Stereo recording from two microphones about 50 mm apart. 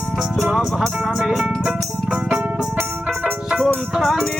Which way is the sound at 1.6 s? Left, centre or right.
Centre.